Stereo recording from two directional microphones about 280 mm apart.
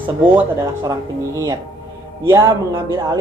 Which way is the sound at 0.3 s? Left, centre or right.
Centre.